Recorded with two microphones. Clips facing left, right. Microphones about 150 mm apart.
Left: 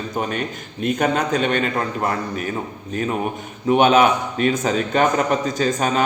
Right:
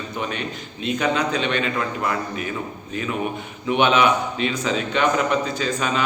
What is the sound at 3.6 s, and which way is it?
A man's voice, 40° left (ahead or behind).